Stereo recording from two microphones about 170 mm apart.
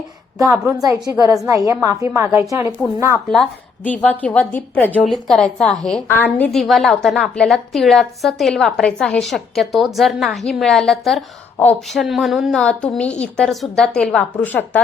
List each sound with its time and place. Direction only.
0.3 s a woman's voice: 20° right (ahead or behind)
3.8 s a woman's voice: 10° left (ahead or behind)